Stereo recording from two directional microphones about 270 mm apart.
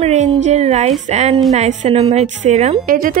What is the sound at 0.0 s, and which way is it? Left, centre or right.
A woman's voice, right.